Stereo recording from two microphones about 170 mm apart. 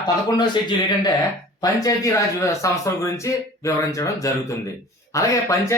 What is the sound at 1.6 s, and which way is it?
A man's voice, 20° left (ahead or behind).